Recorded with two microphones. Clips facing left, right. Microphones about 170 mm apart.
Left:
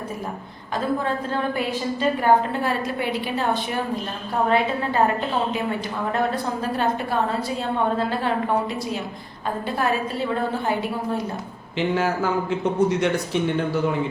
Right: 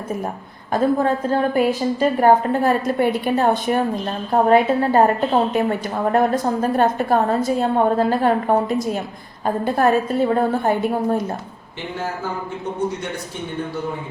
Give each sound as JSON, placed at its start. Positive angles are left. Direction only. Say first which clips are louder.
{"t": 0.7, "sound": "a woman's voice", "louder": "right 6 dB", "side_deg": -45}